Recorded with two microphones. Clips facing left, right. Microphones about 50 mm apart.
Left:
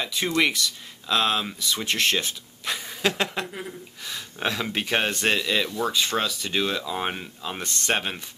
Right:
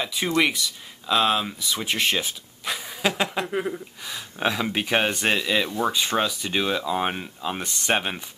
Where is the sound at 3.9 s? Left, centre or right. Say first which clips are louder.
Right 2 dB; centre.